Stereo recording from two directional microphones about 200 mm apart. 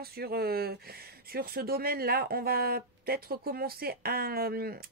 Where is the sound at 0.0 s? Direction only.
50° right (ahead or behind).